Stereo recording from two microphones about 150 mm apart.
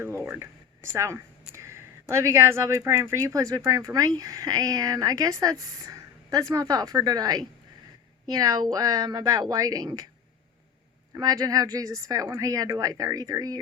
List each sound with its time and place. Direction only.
0.9 s speech: 20° right (ahead or behind)
11.1 s speech: 25° right (ahead or behind)